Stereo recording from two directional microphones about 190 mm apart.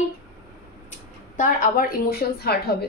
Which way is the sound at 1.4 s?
50° left (ahead or behind).